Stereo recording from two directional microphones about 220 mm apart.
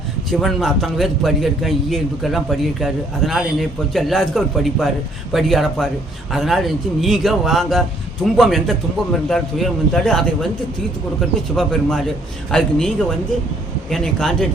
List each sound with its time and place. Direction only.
0.3 s a man's voice: centre (ahead or behind)
11.3 s a man's voice: centre (ahead or behind)